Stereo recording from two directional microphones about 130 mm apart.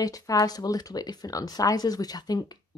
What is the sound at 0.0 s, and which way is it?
Speech, 30° left (ahead or behind).